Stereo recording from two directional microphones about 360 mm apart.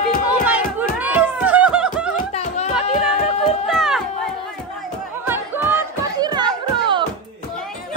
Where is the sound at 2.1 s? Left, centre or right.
Centre.